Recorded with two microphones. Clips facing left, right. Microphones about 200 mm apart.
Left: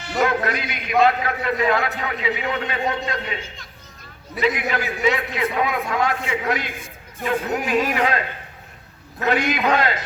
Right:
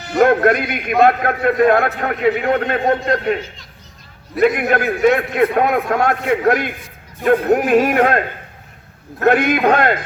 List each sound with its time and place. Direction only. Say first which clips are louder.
0.2 s a man's voice: right 9 dB; 55° right (ahead or behind)
9.2 s a man's voice: right 7 dB; 55° right (ahead or behind)